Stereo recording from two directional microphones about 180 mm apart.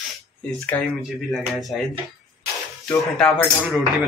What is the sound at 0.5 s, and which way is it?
Speech, 10° left (ahead or behind).